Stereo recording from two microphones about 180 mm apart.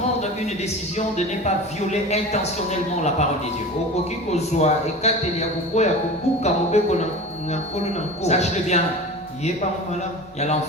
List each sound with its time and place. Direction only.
0.9 s a man's voice: 40° left (ahead or behind)
4.3 s a man's voice: 40° left (ahead or behind)
8.2 s a man's voice: 40° left (ahead or behind)